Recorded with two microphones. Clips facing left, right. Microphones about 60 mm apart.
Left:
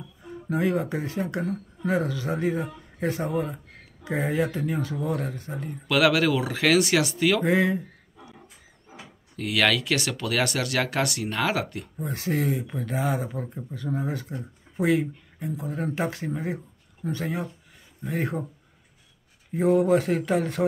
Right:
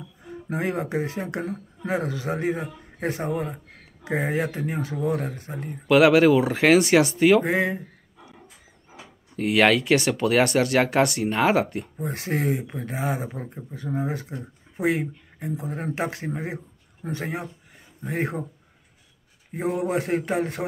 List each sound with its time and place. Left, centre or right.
0.5 s speech: right
9.4 s speech: right
12.6 s speech: right
19.5 s speech: centre
19.9 s speech: right